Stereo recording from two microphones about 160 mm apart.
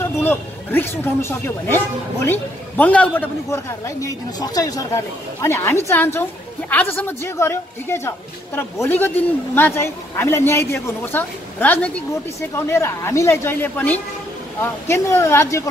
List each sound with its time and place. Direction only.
0.0 s speech: 15° left (ahead or behind)
2.8 s a man's voice: 10° left (ahead or behind)